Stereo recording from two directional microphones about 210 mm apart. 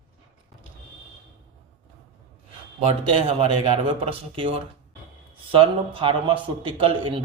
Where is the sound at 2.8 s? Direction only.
25° right (ahead or behind).